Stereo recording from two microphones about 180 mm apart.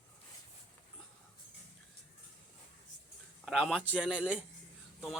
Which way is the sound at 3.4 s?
Centre (ahead or behind).